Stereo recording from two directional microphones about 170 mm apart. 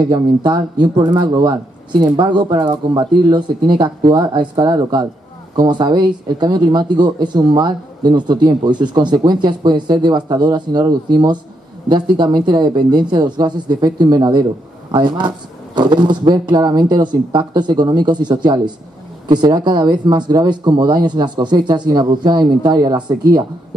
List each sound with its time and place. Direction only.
0.0 s speech: 25° right (ahead or behind)